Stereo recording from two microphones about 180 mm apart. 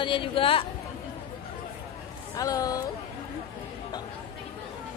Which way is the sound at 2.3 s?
20° left (ahead or behind).